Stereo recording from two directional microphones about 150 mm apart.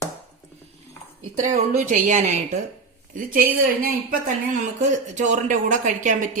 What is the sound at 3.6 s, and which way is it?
Speech, 75° right (ahead or behind).